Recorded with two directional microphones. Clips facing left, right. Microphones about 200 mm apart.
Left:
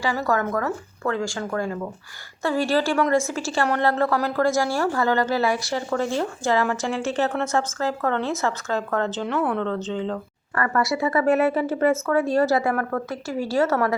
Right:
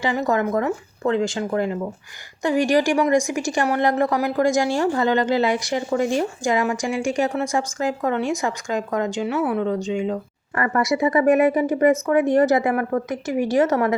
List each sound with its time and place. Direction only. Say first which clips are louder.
0.0 s a woman's voice: right 2 dB; 20° right (ahead or behind)